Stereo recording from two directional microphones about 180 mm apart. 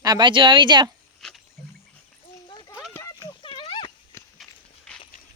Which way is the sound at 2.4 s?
25° left (ahead or behind).